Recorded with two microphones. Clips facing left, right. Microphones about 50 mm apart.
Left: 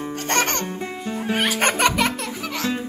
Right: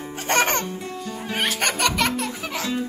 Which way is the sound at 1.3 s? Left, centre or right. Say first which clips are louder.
Left 3 dB; centre.